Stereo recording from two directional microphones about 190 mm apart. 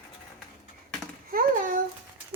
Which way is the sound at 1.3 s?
45° right (ahead or behind).